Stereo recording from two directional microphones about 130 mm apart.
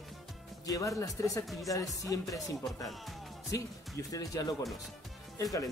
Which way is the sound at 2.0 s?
25° left (ahead or behind).